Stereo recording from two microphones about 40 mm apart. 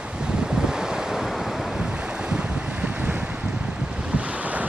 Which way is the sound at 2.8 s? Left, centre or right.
Right.